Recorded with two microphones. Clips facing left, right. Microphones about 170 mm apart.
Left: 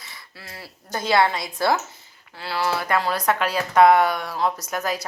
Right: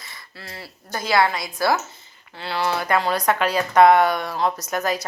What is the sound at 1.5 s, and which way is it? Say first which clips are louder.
Speech: even; 20° left (ahead or behind).